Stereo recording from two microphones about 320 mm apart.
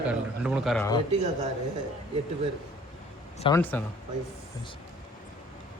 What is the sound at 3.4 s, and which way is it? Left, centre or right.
Speech, centre.